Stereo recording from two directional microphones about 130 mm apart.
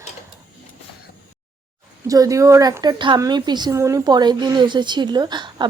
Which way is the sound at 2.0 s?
25° right (ahead or behind).